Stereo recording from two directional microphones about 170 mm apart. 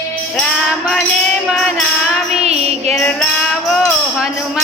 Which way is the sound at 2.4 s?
40° right (ahead or behind).